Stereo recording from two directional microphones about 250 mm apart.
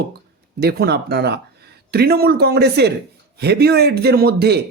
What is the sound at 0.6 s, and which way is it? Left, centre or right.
A man's voice, right.